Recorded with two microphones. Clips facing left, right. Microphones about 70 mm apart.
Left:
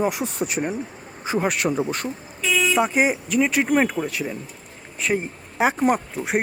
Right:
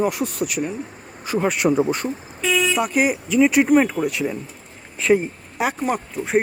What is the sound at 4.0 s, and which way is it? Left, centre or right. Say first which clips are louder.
Speech: right 4 dB; centre.